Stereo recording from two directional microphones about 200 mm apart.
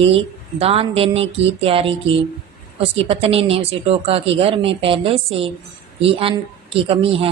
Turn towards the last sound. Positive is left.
turn(degrees=-30)  # may be behind; listen again after turning